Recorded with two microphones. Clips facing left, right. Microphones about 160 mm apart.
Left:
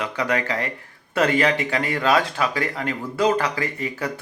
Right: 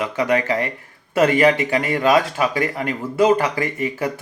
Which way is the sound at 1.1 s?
10° right (ahead or behind).